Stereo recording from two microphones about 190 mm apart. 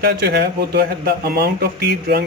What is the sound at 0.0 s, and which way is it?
A man's voice, 60° right (ahead or behind).